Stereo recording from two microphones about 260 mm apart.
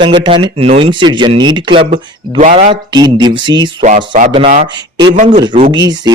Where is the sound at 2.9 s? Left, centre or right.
Centre.